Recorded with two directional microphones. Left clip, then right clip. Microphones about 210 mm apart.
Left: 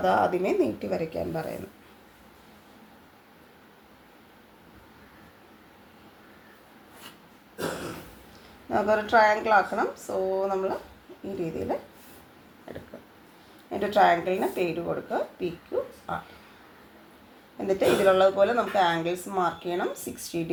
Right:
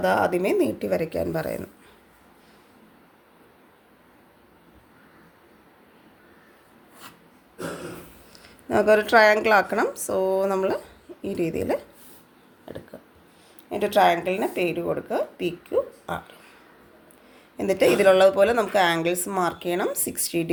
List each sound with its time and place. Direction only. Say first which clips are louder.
0.0 s speech: right 2 dB; 35° right (ahead or behind)
8.7 s speech: right 5 dB; 50° right (ahead or behind)
13.7 s speech: right 2 dB; 35° right (ahead or behind)
17.6 s speech: right 4 dB; 45° right (ahead or behind)